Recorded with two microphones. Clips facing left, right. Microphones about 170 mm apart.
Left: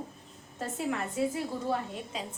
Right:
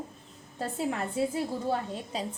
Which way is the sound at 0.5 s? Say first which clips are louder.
Right 2 dB; 30° right (ahead or behind).